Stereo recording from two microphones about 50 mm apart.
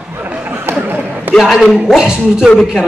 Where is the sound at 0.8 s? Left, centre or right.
Right.